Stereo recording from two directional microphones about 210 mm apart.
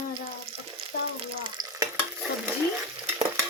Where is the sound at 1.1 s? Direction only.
20° right (ahead or behind).